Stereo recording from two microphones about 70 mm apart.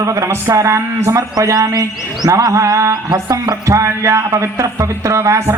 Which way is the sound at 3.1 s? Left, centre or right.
Right.